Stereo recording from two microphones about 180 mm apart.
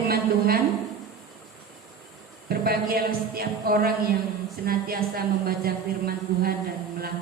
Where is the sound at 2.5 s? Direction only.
60° right (ahead or behind).